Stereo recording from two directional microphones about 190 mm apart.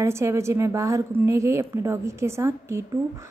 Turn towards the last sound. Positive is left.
turn(degrees=-15)  # may be behind; listen again after turning